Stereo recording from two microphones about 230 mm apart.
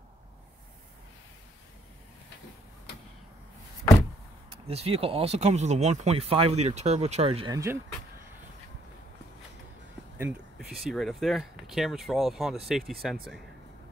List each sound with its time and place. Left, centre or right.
4.6 s speech: right
10.1 s speech: centre